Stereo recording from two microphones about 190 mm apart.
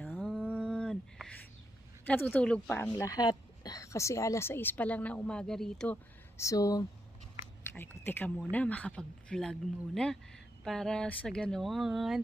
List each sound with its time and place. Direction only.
0.0 s a sound: 5° left (ahead or behind)
2.0 s speech: 10° left (ahead or behind)
2.9 s speech: 20° left (ahead or behind); by 12.2 s centre (ahead or behind)